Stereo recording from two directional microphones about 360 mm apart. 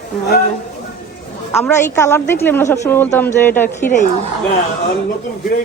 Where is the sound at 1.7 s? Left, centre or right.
Centre.